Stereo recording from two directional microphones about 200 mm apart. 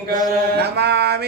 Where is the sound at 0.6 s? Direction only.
55° right (ahead or behind).